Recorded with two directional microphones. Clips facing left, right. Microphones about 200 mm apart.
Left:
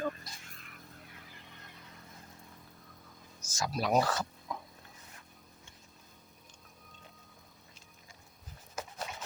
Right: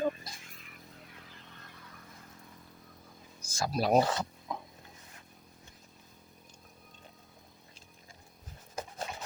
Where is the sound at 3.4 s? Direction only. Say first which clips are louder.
Right 3 dB; 30° right (ahead or behind).